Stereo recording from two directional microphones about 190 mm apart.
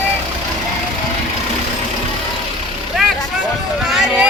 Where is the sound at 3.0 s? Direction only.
Centre (ahead or behind).